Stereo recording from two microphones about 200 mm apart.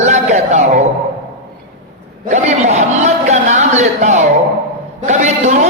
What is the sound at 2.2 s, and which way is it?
A man's voice, 35° right (ahead or behind).